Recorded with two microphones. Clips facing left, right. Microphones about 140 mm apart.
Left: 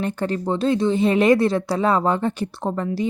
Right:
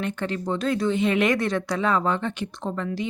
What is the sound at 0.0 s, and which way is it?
Speech, 35° left (ahead or behind).